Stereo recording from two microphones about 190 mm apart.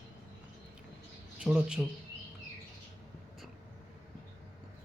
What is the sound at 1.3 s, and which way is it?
Speech, 5° right (ahead or behind).